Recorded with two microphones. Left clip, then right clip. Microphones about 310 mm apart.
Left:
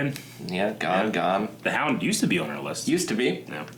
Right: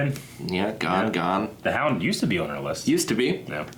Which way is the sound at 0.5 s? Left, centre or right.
Left.